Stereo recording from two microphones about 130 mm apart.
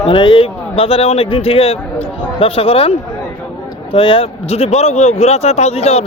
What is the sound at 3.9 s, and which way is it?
A man's voice, 40° left (ahead or behind).